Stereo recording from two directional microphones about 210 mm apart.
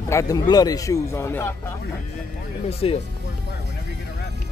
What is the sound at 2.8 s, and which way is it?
Speech, 30° left (ahead or behind).